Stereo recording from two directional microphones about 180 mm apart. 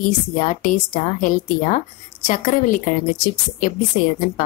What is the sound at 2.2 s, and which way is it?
Speech, 45° left (ahead or behind).